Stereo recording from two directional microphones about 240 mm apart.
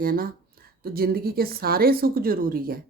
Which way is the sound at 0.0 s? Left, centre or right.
Right.